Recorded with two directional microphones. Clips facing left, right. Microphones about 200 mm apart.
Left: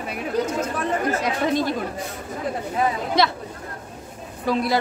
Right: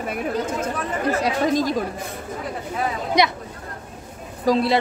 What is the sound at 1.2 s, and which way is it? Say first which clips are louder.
Speech: right 2 dB; 40° right (ahead or behind).